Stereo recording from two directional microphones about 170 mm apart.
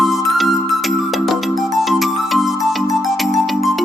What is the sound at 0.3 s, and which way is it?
Music, centre (ahead or behind).